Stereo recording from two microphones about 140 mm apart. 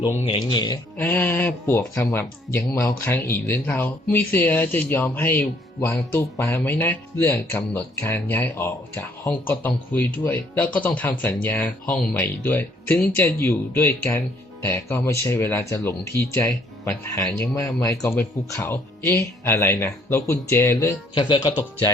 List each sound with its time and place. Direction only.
0.3 s speech: 35° left (ahead or behind)
0.9 s speech: 15° left (ahead or behind)
21.2 s speech: 35° left (ahead or behind)